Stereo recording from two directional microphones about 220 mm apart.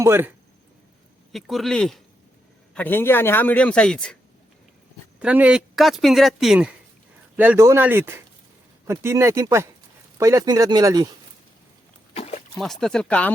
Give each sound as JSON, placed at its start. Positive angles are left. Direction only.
{"t": 0.0, "sound": "a man's voice", "side_deg": -10}
{"t": 5.2, "sound": "speech", "side_deg": -5}
{"t": 12.1, "sound": "a sound", "side_deg": 30}
{"t": 12.5, "sound": "speech", "side_deg": 0}